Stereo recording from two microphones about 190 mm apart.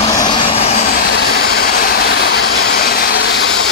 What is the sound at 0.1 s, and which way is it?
Vehicle, 25° left (ahead or behind).